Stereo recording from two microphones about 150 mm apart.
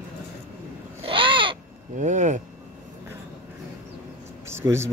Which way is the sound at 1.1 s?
35° right (ahead or behind).